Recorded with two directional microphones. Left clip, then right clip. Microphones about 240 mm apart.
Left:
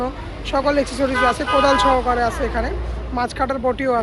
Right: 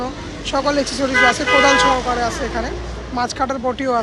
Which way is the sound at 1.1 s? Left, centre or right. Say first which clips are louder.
Right 5 dB; right.